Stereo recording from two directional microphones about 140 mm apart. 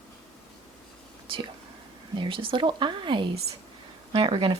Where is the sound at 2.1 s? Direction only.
40° right (ahead or behind).